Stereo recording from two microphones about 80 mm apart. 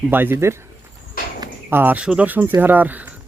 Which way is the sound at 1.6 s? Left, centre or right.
Right.